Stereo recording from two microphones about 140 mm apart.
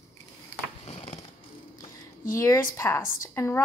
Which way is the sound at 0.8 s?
45° left (ahead or behind).